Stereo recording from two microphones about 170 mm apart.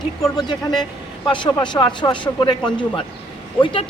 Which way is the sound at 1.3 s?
25° left (ahead or behind).